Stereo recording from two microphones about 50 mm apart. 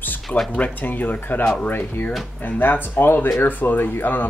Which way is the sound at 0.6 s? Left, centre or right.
Left.